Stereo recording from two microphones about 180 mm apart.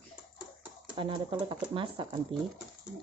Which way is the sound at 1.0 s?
30° right (ahead or behind).